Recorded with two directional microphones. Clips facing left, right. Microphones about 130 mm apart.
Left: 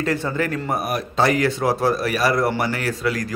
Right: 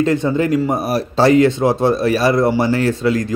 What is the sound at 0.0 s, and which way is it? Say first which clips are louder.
Speech: right 7 dB; 20° right (ahead or behind).